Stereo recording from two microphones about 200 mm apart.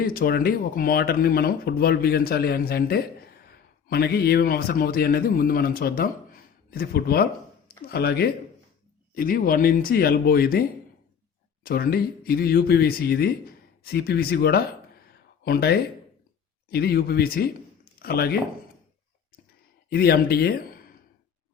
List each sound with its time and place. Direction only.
0.0 s a man's voice: 45° left (ahead or behind)
11.6 s a man's voice: 50° left (ahead or behind)
19.9 s a man's voice: 50° left (ahead or behind)